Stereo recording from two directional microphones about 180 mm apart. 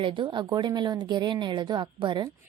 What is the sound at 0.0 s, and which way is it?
A woman's voice, 30° right (ahead or behind).